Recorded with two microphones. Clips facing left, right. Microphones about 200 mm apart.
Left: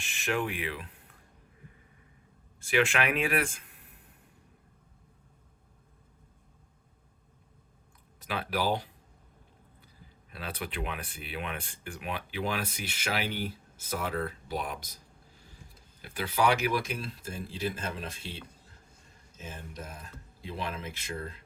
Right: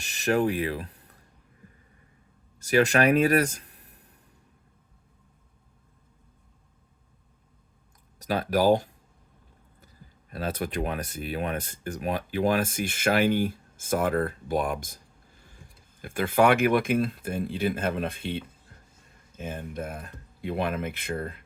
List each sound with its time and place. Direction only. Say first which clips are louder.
0.0 s speech: right 7 dB; 40° right (ahead or behind)
2.6 s speech: right 6 dB; 40° right (ahead or behind)
8.2 s speech: right 8 dB; 40° right (ahead or behind)
16.0 s speech: right 7 dB; 50° right (ahead or behind)
19.4 s speech: right 9 dB; 55° right (ahead or behind)